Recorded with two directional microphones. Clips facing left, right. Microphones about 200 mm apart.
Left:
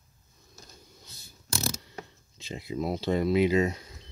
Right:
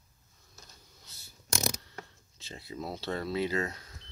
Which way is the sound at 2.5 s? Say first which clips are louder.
Left 8 dB; 15° left (ahead or behind).